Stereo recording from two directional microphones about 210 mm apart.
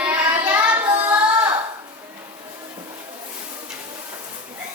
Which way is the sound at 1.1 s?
10° right (ahead or behind).